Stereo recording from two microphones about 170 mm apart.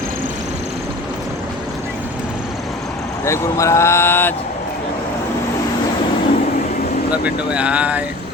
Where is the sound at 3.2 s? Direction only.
15° left (ahead or behind).